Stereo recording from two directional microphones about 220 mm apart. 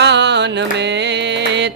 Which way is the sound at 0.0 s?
50° right (ahead or behind).